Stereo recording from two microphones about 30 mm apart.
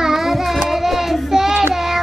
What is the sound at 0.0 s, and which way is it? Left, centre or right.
Child singing, centre.